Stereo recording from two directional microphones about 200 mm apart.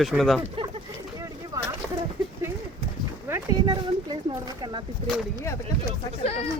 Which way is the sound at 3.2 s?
15° right (ahead or behind).